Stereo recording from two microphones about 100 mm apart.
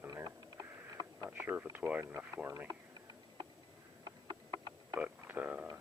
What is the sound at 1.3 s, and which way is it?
Speech, 15° right (ahead or behind).